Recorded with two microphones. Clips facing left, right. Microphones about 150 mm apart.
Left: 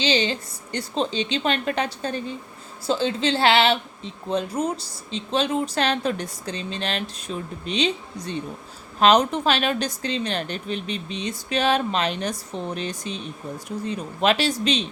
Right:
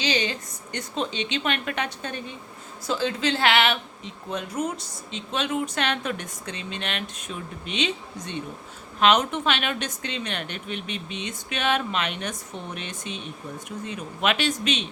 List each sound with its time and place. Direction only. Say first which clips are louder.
0.0 s a woman's voice: left 4 dB; 30° left (ahead or behind)